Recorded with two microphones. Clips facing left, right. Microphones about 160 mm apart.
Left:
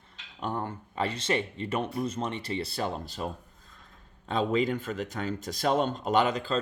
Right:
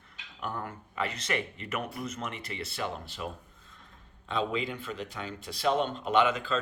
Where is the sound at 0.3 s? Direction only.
30° left (ahead or behind).